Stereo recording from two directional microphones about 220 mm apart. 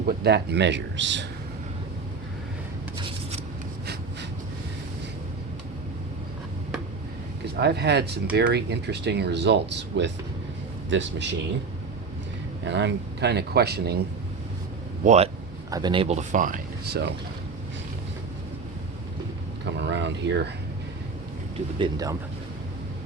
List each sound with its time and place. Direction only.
0.0 s speech: 45° right (ahead or behind)
7.5 s speech: 50° right (ahead or behind)
12.6 s speech: 50° right (ahead or behind)
15.0 s speech: 30° right (ahead or behind); by 17.1 s 45° right (ahead or behind)
19.8 s a sound: 55° right (ahead or behind)
21.8 s speech: 15° right (ahead or behind)